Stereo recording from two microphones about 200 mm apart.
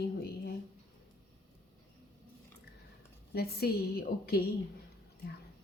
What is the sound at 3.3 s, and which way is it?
A woman's voice, 50° left (ahead or behind).